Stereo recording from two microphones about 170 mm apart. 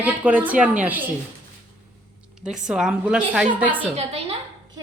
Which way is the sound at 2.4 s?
5° right (ahead or behind).